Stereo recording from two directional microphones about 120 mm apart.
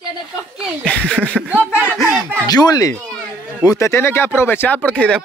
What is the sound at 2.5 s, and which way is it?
Speech, 35° left (ahead or behind).